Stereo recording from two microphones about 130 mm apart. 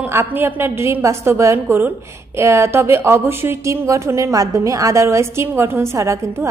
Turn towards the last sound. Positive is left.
turn(degrees=-25)  # may be behind; listen again after turning